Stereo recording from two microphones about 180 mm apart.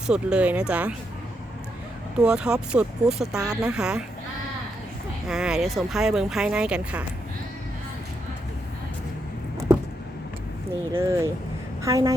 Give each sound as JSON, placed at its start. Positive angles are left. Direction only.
{"t": 0.1, "sound": "speech", "side_deg": -5}
{"t": 2.2, "sound": "speech", "side_deg": -5}
{"t": 5.3, "sound": "speech", "side_deg": -5}
{"t": 10.9, "sound": "a woman's voice", "side_deg": -15}